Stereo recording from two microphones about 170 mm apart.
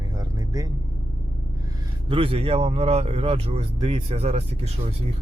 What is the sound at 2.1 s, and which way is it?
Speech, 35° right (ahead or behind).